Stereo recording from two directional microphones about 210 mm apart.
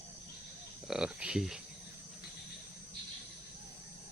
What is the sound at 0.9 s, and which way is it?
Speech, 5° right (ahead or behind).